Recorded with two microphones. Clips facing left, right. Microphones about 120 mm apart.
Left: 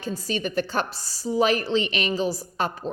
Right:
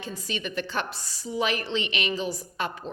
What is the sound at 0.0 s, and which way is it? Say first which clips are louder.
A woman's voice: left 6 dB; 40° left (ahead or behind).